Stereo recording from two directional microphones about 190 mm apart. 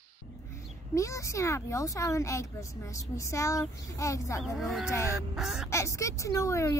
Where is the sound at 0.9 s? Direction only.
15° left (ahead or behind).